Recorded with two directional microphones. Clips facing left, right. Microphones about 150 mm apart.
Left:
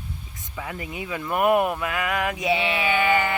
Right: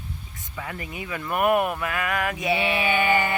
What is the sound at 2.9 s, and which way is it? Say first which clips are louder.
Speech: left 2 dB; 20° right (ahead or behind).